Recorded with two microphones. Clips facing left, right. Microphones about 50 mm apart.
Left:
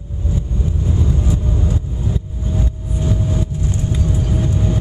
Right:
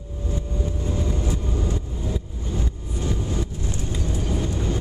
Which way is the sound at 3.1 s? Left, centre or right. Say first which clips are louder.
Left 7 dB; centre.